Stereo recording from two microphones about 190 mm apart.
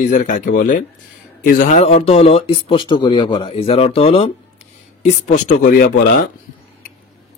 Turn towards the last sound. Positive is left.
turn(degrees=45)  # may be behind; listen again after turning